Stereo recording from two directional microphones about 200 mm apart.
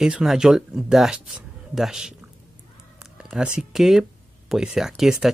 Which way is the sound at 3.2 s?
5° right (ahead or behind).